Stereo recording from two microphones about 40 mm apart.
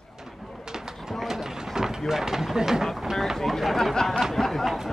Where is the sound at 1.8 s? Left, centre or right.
Centre.